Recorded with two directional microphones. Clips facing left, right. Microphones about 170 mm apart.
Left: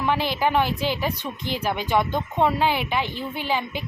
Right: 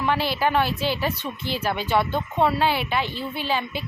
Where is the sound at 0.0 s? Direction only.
15° left (ahead or behind).